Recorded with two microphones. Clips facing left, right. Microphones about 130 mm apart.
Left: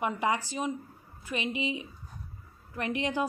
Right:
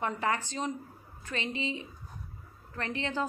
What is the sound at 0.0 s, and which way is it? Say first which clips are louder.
A woman's voice: left 2 dB; 15° left (ahead or behind).